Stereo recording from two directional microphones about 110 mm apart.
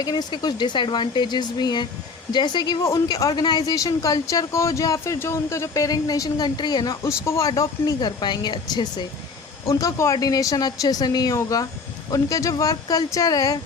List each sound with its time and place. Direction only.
0.0 s speech: 40° left (ahead or behind)
2.8 s speech: 30° left (ahead or behind)
7.0 s speech: 25° left (ahead or behind)
7.9 s speech: 40° left (ahead or behind)
9.6 s speech: 30° left (ahead or behind)